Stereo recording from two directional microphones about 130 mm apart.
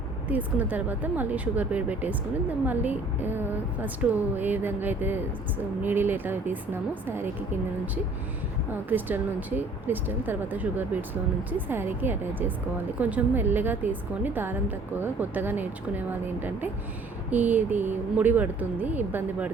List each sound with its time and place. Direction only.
0.3 s speech: 10° right (ahead or behind)
8.9 s speech: 15° right (ahead or behind)